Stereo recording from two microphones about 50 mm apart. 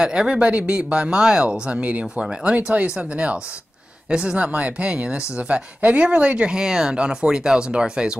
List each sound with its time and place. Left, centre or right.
0.0 s speech: centre
2.1 s speech: centre
2.5 s speech: right
6.5 s speech: centre